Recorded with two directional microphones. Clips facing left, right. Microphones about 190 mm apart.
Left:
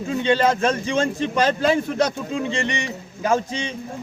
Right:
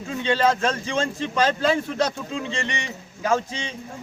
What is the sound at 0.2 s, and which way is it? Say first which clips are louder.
A man's voice: left 2 dB; 20° left (ahead or behind).